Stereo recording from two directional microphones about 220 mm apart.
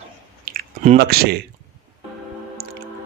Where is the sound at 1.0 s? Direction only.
45° right (ahead or behind).